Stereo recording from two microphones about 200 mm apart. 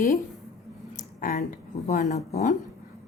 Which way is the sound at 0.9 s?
40° left (ahead or behind).